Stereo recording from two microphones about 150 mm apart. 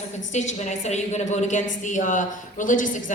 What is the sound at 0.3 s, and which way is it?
A woman's voice, 50° left (ahead or behind).